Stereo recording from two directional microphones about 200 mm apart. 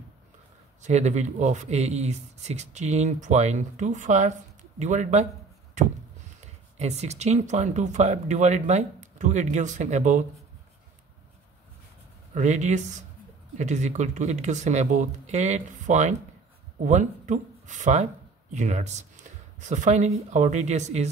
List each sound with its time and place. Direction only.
0.8 s speech: 35° right (ahead or behind)
6.4 s speech: 35° right (ahead or behind)
12.4 s speech: 35° right (ahead or behind)